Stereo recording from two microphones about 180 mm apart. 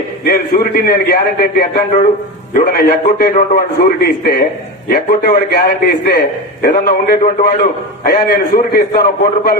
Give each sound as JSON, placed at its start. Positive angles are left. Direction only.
{"t": 0.3, "sound": "a man's voice", "side_deg": 55}
{"t": 7.2, "sound": "a man's voice", "side_deg": 45}